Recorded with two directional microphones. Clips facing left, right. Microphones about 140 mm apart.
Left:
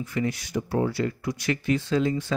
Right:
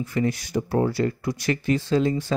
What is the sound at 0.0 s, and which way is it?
Speech, 40° right (ahead or behind).